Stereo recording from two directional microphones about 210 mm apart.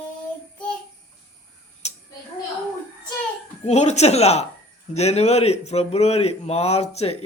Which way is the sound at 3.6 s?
30° left (ahead or behind).